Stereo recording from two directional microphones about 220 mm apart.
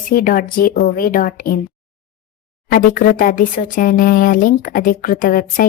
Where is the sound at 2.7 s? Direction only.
40° left (ahead or behind).